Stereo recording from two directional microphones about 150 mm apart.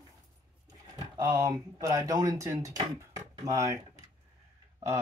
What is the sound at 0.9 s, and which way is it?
Speech, 25° right (ahead or behind).